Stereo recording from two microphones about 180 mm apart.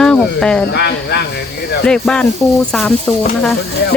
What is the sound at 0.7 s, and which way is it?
Speech, 65° left (ahead or behind).